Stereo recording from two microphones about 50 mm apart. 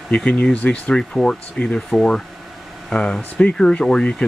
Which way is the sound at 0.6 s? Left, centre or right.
Left.